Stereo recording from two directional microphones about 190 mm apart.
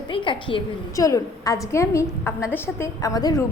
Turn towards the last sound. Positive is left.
turn(degrees=20)  # may be behind; listen again after turning